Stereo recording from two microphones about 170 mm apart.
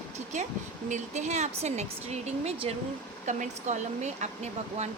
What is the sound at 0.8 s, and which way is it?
Speech, 45° right (ahead or behind).